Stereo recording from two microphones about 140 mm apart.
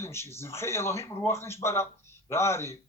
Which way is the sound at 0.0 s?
20° left (ahead or behind).